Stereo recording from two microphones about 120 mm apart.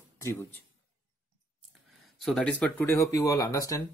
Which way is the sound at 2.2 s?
5° left (ahead or behind).